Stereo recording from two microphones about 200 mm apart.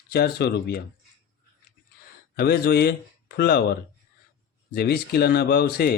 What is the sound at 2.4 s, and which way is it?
Speech, 50° left (ahead or behind).